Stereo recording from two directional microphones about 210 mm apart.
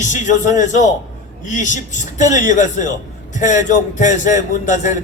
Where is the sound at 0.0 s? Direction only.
35° left (ahead or behind).